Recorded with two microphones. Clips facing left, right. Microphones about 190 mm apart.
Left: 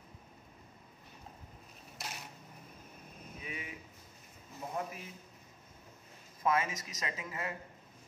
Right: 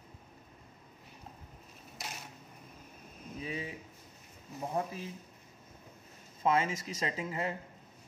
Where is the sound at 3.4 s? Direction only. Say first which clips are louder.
Right 7 dB; 30° right (ahead or behind).